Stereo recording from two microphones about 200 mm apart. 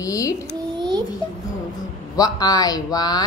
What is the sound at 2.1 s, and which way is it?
Speech, 20° left (ahead or behind).